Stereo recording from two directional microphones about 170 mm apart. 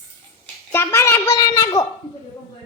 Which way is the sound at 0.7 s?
15° left (ahead or behind).